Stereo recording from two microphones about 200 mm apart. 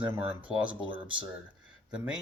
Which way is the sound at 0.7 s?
25° right (ahead or behind).